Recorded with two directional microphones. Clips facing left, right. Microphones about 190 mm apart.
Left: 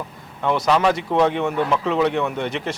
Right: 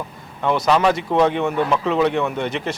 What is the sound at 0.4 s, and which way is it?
Speech, 20° right (ahead or behind).